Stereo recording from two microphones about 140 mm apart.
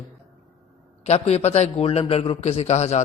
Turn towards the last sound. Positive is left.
turn(degrees=55)  # may be behind; listen again after turning